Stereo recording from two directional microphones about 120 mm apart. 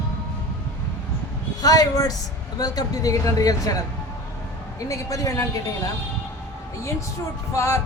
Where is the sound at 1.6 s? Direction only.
30° left (ahead or behind).